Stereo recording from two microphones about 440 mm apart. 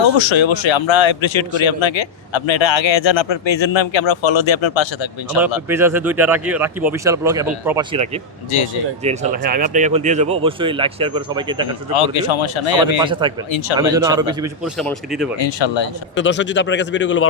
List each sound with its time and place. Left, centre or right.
0.2 s a man's voice: left
5.6 s speech: centre
9.0 s speech: centre
11.9 s speech: left
13.0 s speech: centre
15.4 s speech: left
16.1 s speech: left